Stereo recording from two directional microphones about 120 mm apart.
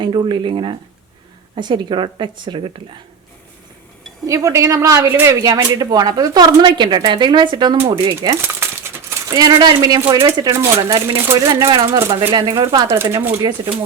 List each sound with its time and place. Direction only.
0.0 s speech: 40° right (ahead or behind)
4.3 s a woman's voice: 25° right (ahead or behind)
10.5 s a woman's voice: 20° right (ahead or behind)
10.9 s speech: 40° right (ahead or behind)
11.6 s a woman's voice: 25° right (ahead or behind)
12.3 s speech: 35° right (ahead or behind)
12.9 s a woman's voice: 25° right (ahead or behind)
13.4 s speech: 35° right (ahead or behind)